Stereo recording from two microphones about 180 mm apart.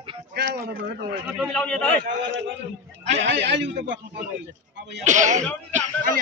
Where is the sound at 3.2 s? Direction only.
80° right.